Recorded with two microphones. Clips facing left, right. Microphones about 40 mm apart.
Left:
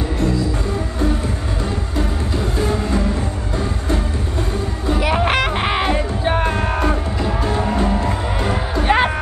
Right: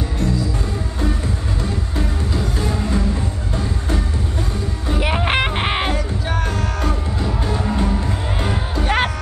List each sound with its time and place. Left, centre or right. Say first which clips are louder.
5.3 s a sound: left 1 dB; centre
5.9 s music: left 4 dB; left
7.2 s music: left 3 dB; left